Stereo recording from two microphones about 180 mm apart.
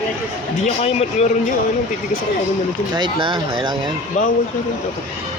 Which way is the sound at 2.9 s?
25° right (ahead or behind).